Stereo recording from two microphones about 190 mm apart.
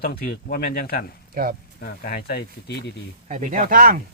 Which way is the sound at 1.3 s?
50° right (ahead or behind).